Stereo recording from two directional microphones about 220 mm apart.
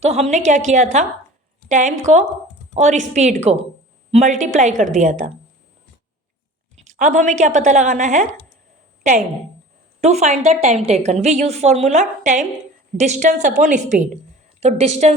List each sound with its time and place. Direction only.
0.0 s a woman's voice: 30° right (ahead or behind)
2.1 s a woman's voice: 35° right (ahead or behind)
6.8 s a woman's voice: 35° right (ahead or behind)
10.0 s a woman's voice: 30° right (ahead or behind)